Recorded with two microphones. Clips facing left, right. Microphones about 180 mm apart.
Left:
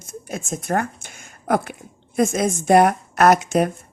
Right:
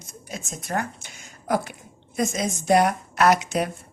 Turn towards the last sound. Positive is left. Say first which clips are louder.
# left 4 dB
turn(degrees=50)  # may be behind; listen again after turning